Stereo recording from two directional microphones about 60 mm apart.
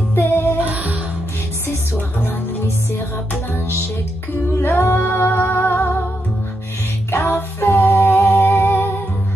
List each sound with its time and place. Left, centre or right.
0.1 s music: left
4.6 s music: left
7.1 s music: left